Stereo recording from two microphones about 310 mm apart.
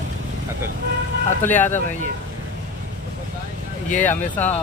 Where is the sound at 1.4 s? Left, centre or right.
Centre.